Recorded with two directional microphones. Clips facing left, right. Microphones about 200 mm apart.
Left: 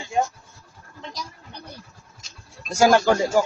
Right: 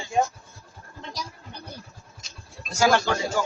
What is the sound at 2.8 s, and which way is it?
Speech, 45° left (ahead or behind).